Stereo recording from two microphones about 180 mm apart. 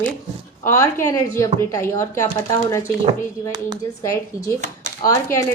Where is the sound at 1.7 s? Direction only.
15° left (ahead or behind).